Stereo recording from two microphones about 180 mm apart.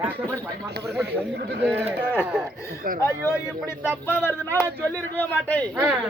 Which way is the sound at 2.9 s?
50° right (ahead or behind).